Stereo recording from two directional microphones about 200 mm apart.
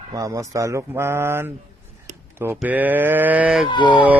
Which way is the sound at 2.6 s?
10° right (ahead or behind).